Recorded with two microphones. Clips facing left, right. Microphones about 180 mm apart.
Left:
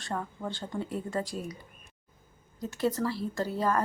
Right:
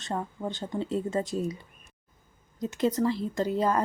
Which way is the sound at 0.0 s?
20° right (ahead or behind).